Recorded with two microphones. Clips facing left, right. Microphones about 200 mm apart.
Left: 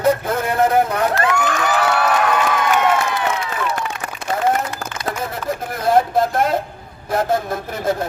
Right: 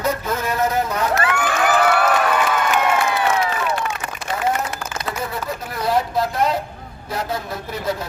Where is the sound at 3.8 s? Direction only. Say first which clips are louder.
Even; 55° left (ahead or behind).